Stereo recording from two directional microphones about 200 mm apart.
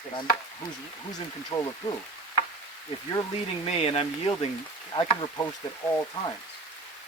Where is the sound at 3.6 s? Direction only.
30° left (ahead or behind).